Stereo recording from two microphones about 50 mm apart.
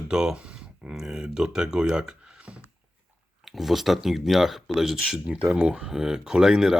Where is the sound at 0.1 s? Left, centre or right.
Centre.